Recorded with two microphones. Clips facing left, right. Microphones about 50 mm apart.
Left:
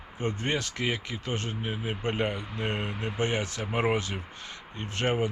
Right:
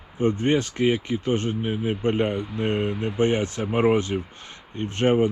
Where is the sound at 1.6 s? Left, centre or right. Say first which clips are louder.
Right 7 dB; centre.